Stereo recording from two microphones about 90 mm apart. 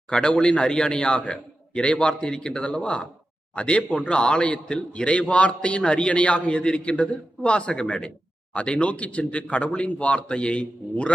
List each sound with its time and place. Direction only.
0.1 s a man's voice: 10° left (ahead or behind)